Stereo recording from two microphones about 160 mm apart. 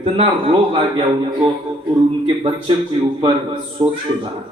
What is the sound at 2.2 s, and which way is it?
Speech, 35° right (ahead or behind).